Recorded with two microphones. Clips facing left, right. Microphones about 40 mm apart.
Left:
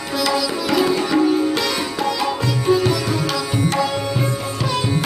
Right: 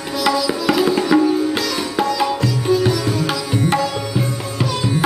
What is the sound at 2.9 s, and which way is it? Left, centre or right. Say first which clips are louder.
Sitar: right 1 dB; centre.